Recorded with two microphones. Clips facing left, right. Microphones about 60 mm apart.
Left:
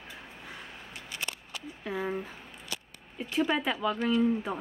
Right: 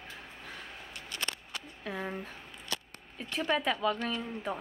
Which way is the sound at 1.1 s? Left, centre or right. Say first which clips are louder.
Even; right.